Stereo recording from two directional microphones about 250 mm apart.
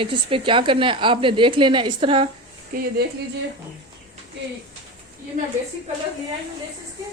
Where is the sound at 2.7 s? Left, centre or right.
Right.